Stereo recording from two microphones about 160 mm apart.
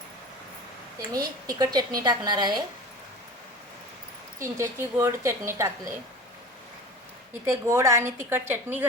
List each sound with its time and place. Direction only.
1.1 s a woman's voice: 25° right (ahead or behind)
4.4 s speech: 15° right (ahead or behind)
7.4 s speech: 15° right (ahead or behind)